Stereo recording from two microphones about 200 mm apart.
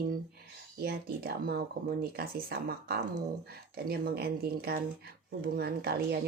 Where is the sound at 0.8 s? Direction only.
50° right (ahead or behind).